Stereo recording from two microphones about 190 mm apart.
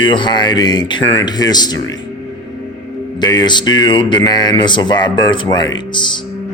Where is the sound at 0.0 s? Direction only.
25° left (ahead or behind).